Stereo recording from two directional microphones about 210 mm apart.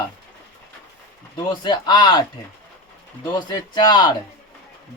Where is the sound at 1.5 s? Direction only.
20° left (ahead or behind).